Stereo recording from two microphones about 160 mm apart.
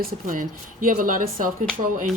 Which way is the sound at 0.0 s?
60° right (ahead or behind).